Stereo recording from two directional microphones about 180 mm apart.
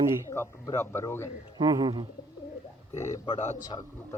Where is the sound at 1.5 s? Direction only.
25° right (ahead or behind).